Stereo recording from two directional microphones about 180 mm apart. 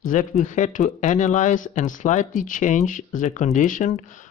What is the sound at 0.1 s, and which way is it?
Speech, 45° left (ahead or behind).